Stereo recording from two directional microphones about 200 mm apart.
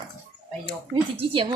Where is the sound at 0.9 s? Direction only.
25° right (ahead or behind).